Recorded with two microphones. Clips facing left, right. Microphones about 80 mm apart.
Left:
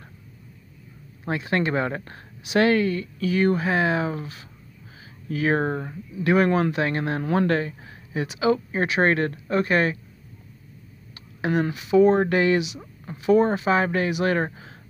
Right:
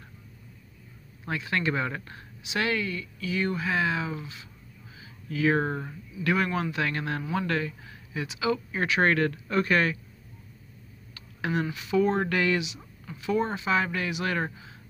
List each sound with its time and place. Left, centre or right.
1.2 s speech: left
11.1 s a sound: left
11.9 s speech: left